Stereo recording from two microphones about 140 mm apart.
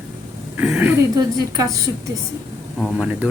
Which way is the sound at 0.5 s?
10° right (ahead or behind).